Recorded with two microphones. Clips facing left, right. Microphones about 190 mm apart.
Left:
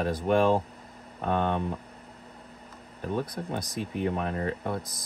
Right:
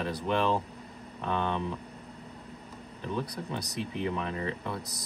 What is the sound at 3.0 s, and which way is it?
Speech, 45° left (ahead or behind).